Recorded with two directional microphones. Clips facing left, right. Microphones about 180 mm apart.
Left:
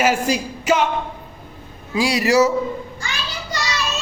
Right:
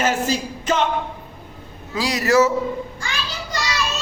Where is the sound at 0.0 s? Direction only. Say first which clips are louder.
Left 2 dB; 10° left (ahead or behind).